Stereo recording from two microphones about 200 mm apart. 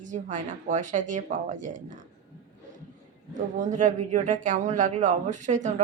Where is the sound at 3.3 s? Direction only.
40° right (ahead or behind).